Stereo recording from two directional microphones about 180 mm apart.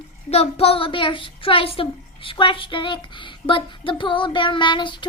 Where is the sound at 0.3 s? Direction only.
35° left (ahead or behind).